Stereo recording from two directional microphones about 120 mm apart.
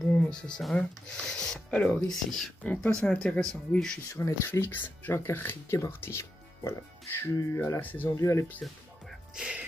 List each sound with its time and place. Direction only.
0.2 s speech: 5° left (ahead or behind)
4.1 s speech: 20° left (ahead or behind)
9.3 s speech: 5° right (ahead or behind)